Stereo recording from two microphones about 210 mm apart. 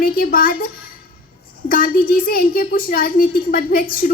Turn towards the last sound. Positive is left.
turn(degrees=40)  # may be behind; listen again after turning